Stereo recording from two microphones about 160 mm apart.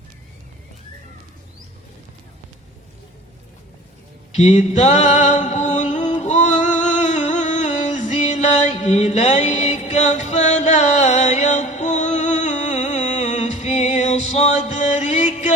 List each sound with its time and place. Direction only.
4.4 s music: 45° left (ahead or behind)